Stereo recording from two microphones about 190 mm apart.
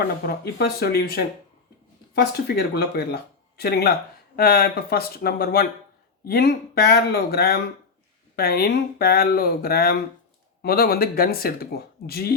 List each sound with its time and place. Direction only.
0.3 s speech: 55° left (ahead or behind)